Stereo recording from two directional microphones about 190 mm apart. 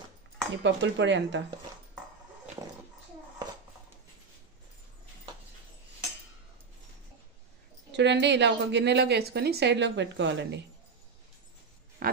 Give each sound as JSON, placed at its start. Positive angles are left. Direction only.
{"t": 0.7, "sound": "speech", "side_deg": -70}
{"t": 2.6, "sound": "a sound", "side_deg": -15}
{"t": 7.9, "sound": "a woman's voice", "side_deg": -65}
{"t": 12.0, "sound": "pig", "side_deg": -50}